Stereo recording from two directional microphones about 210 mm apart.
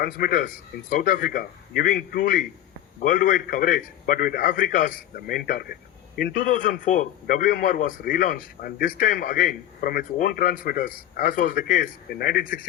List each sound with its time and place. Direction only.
0.0 s a man's voice: 45° left (ahead or behind)